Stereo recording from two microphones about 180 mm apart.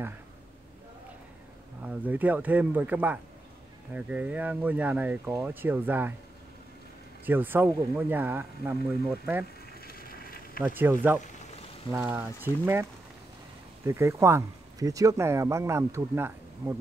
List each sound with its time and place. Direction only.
1.8 s speech: 10° right (ahead or behind)
7.2 s speech: 10° right (ahead or behind)
9.8 s a sound: 55° left (ahead or behind)
10.6 s speech: 10° right (ahead or behind)
13.8 s speech: 15° right (ahead or behind)